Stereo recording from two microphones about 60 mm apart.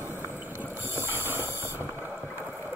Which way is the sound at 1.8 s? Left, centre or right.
Right.